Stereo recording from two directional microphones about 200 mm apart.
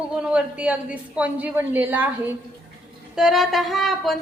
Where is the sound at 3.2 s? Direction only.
Centre (ahead or behind).